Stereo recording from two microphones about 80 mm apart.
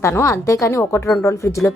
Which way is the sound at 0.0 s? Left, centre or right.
Left.